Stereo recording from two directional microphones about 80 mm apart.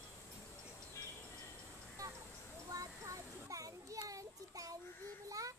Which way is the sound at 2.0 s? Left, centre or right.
Right.